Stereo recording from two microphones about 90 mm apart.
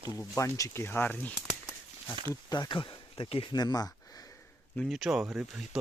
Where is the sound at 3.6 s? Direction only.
50° left (ahead or behind).